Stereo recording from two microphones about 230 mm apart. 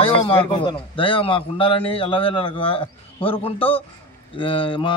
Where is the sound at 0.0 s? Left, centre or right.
Left.